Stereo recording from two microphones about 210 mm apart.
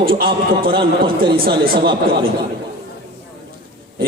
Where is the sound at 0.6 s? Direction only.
45° right (ahead or behind).